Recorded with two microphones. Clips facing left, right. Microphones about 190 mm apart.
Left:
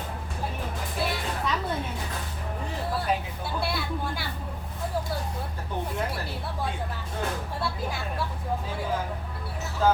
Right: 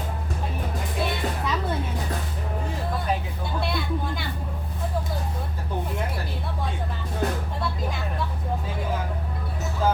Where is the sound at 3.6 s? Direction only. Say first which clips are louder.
Right 3 dB; 5° left (ahead or behind).